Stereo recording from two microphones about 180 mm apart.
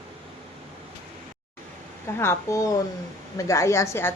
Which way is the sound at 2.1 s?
15° left (ahead or behind).